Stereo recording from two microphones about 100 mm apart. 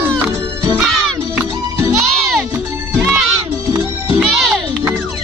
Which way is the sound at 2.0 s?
Centre (ahead or behind).